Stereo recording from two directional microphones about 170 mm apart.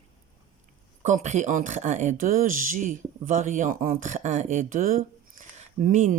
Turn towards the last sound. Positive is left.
turn(degrees=-50)  # may be behind; listen again after turning